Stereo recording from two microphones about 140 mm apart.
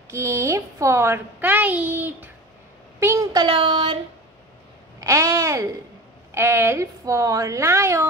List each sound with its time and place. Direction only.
0.1 s a child's voice: 20° right (ahead or behind)
3.3 s child singing: 40° right (ahead or behind)
5.0 s a sound: 20° right (ahead or behind)
6.3 s a woman's voice: 15° right (ahead or behind)